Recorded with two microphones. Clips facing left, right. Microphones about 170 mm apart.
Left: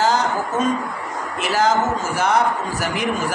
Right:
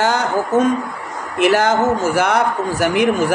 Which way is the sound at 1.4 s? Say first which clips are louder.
Right 5 dB; 65° right (ahead or behind).